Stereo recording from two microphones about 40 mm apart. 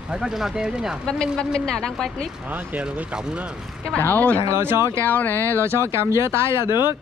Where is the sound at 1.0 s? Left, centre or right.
Centre.